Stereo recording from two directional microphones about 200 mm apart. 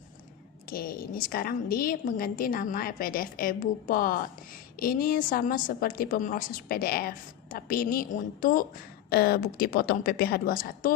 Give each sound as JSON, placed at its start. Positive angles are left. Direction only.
{"t": 0.7, "sound": "a woman's voice", "side_deg": 45}